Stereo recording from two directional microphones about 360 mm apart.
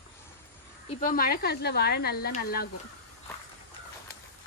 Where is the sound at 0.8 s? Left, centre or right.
Left.